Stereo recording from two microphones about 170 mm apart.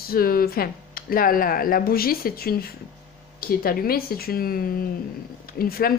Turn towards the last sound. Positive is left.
turn(degrees=60)  # may be behind; listen again after turning